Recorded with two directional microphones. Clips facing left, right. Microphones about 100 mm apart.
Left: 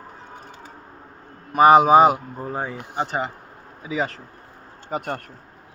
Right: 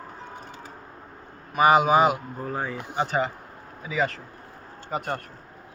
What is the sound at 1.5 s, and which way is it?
Speech, 45° left (ahead or behind).